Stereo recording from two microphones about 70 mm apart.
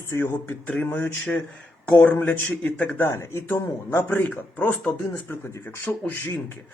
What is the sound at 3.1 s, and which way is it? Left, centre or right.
Speech, left.